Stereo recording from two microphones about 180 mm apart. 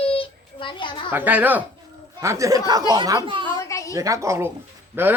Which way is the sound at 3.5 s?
20° left (ahead or behind).